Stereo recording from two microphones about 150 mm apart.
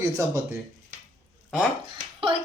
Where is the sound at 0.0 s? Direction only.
20° right (ahead or behind).